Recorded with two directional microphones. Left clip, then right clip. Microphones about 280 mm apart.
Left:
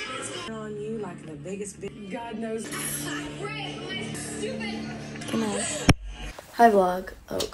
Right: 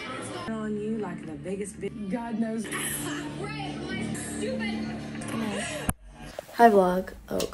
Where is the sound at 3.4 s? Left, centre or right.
Right.